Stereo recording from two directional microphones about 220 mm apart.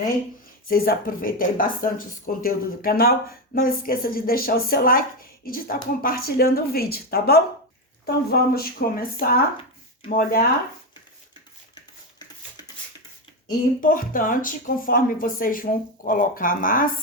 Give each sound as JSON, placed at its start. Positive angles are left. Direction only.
{"t": 0.7, "sound": "a woman's voice", "side_deg": 40}
{"t": 10.1, "sound": "speech", "side_deg": 40}
{"t": 13.8, "sound": "speech", "side_deg": 40}